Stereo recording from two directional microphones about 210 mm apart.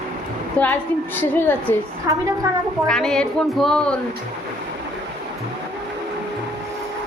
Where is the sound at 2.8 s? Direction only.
5° left (ahead or behind).